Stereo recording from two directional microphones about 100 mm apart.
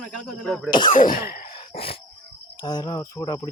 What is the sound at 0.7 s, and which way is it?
Speech, 50° left (ahead or behind).